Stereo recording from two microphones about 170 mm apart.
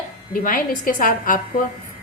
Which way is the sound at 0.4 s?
55° left (ahead or behind).